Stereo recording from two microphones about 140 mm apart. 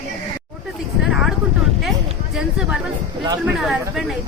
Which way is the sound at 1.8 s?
Centre (ahead or behind).